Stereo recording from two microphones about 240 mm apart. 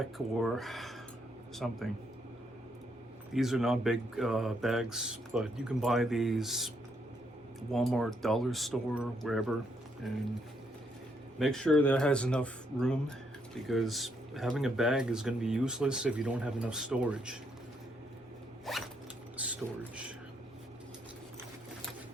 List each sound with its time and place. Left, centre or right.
0.0 s speech: centre
3.3 s speech: centre
11.3 s speech: centre
18.7 s speech: centre
19.4 s a sound: centre